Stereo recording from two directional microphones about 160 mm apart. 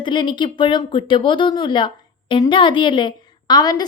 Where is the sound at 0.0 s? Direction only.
30° left (ahead or behind).